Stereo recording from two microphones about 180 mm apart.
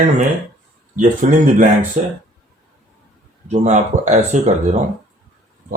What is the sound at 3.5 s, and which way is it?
Speech, 40° right (ahead or behind).